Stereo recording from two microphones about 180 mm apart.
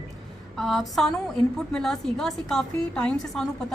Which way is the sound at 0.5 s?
Centre (ahead or behind).